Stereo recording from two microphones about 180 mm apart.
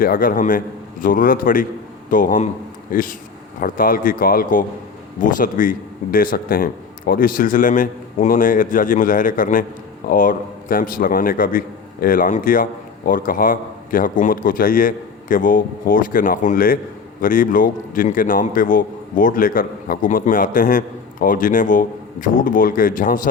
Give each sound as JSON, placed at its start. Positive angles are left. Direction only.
{"t": 0.0, "sound": "a man's voice", "side_deg": 50}